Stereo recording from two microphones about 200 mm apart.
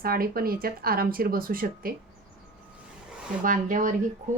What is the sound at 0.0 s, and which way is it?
Speech, 45° right (ahead or behind).